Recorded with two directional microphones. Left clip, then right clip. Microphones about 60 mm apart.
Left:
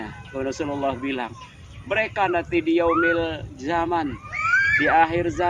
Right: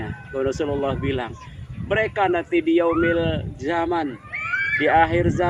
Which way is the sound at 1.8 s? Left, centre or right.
Left.